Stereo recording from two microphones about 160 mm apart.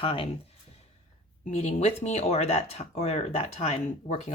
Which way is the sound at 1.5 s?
45° left (ahead or behind).